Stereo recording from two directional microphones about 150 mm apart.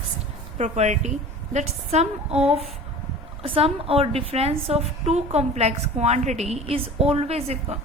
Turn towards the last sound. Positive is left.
turn(degrees=-45)  # may be behind; listen again after turning